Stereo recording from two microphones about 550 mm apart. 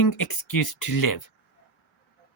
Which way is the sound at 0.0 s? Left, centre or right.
Left.